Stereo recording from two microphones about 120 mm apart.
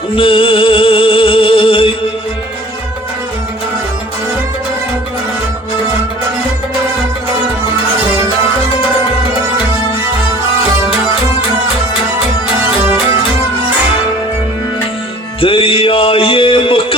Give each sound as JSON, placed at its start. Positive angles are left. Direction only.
{"t": 0.2, "sound": "music", "side_deg": 45}
{"t": 15.4, "sound": "music", "side_deg": 50}